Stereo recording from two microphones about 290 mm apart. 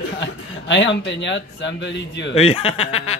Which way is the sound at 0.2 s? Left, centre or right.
Left.